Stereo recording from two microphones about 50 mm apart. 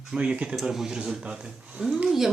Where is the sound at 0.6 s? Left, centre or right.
Centre.